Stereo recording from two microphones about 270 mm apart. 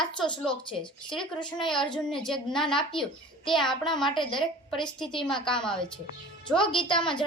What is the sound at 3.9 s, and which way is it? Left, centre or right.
A woman's voice, centre.